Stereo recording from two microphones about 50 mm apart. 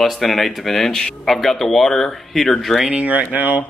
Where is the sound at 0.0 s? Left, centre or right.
Centre.